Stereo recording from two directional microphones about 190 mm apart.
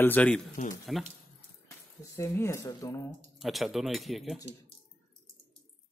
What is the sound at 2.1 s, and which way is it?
Speech, 15° left (ahead or behind).